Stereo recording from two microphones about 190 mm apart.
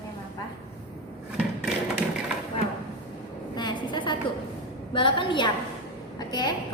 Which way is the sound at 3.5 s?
25° left (ahead or behind).